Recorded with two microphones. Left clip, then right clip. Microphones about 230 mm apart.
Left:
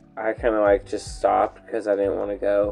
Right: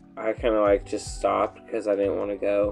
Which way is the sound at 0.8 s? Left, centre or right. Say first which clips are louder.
Left 3 dB; centre.